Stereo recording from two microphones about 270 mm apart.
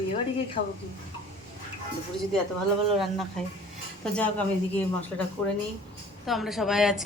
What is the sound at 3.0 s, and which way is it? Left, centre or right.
Speech, centre.